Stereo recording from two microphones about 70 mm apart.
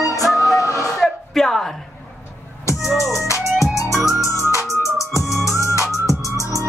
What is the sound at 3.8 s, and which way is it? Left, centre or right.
Music, left.